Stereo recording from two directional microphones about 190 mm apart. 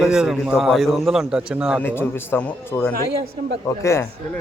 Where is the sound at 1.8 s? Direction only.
10° left (ahead or behind).